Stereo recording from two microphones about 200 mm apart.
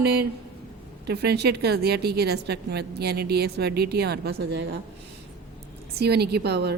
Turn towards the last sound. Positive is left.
turn(degrees=-55)  # may be behind; listen again after turning